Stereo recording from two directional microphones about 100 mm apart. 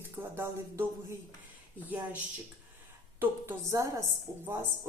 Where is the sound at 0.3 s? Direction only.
25° right (ahead or behind).